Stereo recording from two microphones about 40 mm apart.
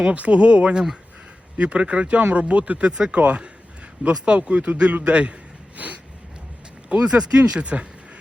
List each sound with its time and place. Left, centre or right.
0.0 s speech: right
2.9 s speech: centre
3.2 s a man's voice: right
6.8 s speech: right